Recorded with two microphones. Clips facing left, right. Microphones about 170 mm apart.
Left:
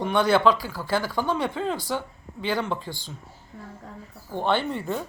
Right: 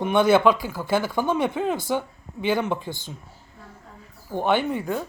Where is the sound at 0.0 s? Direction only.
20° right (ahead or behind).